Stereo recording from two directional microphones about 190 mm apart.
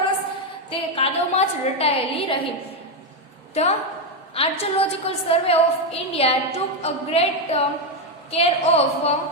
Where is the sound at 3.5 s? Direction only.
35° left (ahead or behind).